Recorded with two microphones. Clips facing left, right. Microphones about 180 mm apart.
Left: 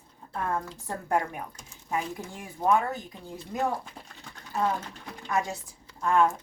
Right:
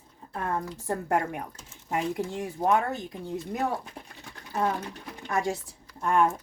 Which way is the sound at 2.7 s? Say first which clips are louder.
Left 1 dB; 20° right (ahead or behind).